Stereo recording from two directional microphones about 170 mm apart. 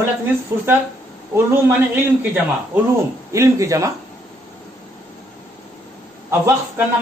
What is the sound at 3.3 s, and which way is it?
Speech, 15° right (ahead or behind).